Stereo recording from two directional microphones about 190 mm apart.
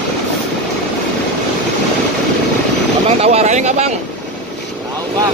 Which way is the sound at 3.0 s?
35° right (ahead or behind).